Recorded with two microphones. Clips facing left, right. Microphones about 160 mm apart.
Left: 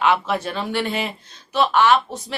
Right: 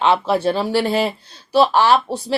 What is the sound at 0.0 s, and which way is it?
A woman's voice, 30° right (ahead or behind).